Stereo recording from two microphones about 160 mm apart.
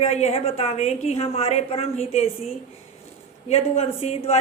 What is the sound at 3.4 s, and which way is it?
Speech, 40° left (ahead or behind).